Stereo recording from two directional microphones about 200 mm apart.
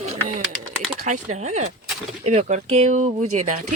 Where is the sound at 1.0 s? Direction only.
35° right (ahead or behind).